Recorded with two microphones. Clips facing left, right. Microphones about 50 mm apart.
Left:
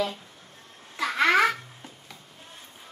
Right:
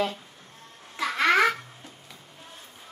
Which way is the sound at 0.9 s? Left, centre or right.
Centre.